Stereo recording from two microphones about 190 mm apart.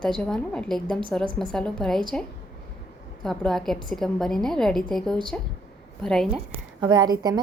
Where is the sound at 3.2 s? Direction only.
Centre (ahead or behind).